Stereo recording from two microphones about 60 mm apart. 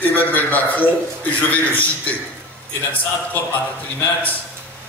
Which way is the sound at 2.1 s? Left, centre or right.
Left.